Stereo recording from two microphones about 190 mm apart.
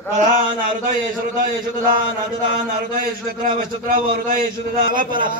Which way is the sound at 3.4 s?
50° right (ahead or behind).